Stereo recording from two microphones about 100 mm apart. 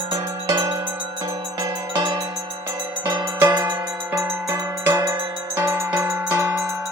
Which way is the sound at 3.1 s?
45° right (ahead or behind).